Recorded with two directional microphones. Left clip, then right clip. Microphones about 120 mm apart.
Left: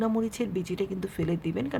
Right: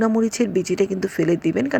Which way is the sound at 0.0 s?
40° right (ahead or behind).